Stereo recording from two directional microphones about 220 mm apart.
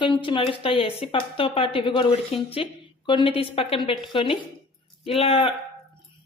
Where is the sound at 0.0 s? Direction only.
20° left (ahead or behind).